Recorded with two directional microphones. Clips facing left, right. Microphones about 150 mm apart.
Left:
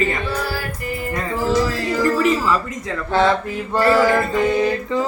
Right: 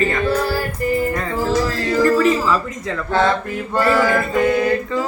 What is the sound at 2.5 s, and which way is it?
Speech, 15° left (ahead or behind).